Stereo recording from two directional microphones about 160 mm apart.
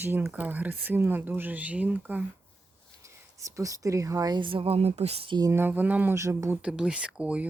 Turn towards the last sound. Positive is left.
turn(degrees=-5)  # may be behind; listen again after turning